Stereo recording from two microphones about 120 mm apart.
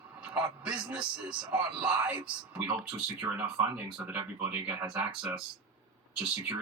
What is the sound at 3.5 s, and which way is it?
Speech, 15° right (ahead or behind).